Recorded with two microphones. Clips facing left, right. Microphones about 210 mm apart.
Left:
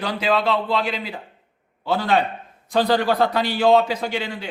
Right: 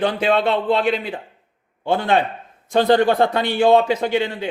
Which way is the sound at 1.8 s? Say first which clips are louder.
Right 2 dB; 25° right (ahead or behind).